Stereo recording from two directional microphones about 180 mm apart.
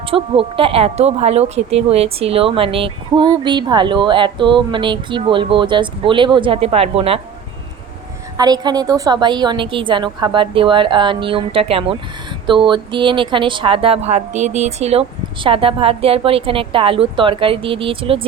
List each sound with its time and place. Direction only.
0.0 s speech: 30° right (ahead or behind)
8.4 s a woman's voice: 20° right (ahead or behind)